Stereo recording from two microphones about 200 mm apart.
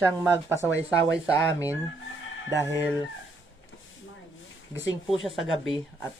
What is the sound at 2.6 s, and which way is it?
Chicken, 15° left (ahead or behind).